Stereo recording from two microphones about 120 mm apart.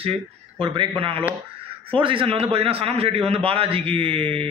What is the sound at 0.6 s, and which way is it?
Speech, 50° right (ahead or behind).